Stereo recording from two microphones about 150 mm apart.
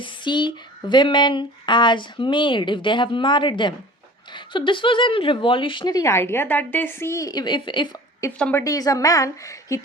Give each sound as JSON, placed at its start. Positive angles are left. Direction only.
{"t": 0.0, "sound": "speech", "side_deg": 30}
{"t": 8.2, "sound": "a woman's voice", "side_deg": 20}